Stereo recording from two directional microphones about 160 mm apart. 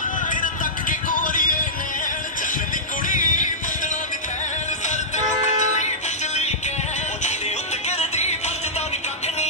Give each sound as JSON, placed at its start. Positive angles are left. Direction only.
{"t": 0.3, "sound": "music", "side_deg": 55}
{"t": 3.1, "sound": "music", "side_deg": 55}
{"t": 4.8, "sound": "music", "side_deg": 45}
{"t": 8.0, "sound": "music", "side_deg": 45}